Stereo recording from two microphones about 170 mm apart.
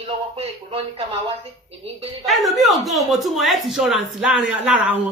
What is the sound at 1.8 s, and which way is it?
Speech, 35° right (ahead or behind).